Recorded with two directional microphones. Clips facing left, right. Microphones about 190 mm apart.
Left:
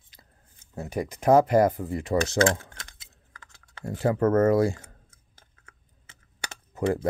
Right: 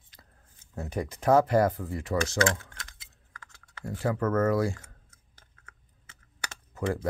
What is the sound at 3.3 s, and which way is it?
Computer keyboard, 25° left (ahead or behind).